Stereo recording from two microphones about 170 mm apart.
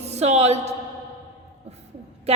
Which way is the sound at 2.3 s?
35° right (ahead or behind).